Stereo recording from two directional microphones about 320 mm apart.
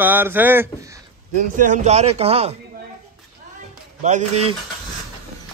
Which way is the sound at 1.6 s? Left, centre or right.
Right.